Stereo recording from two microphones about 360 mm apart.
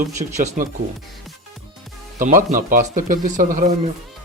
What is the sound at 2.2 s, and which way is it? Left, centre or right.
Speech, right.